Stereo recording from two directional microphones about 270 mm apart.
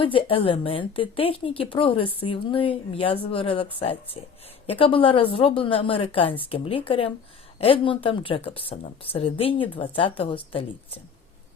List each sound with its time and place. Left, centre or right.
0.0 s a woman's voice: centre